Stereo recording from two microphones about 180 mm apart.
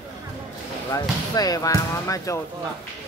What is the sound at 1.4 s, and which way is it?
Speech, 20° left (ahead or behind).